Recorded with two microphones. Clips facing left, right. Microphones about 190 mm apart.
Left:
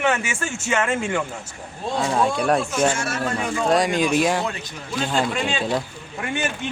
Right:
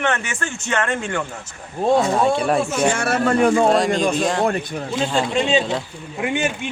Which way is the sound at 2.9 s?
60° right (ahead or behind).